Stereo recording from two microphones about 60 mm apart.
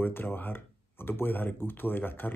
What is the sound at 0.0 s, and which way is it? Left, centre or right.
Speech, left.